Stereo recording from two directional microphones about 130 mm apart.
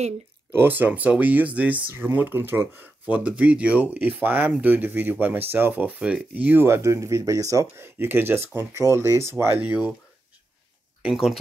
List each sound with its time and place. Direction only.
0.5 s speech: 15° right (ahead or behind)
11.0 s speech: 5° right (ahead or behind)